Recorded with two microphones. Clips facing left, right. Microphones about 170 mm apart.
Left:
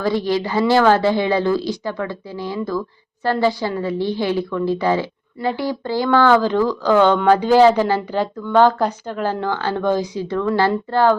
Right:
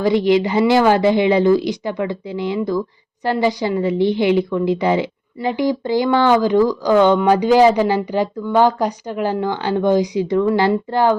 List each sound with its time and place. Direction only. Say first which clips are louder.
0.0 s a woman's voice: right 5 dB; 20° right (ahead or behind)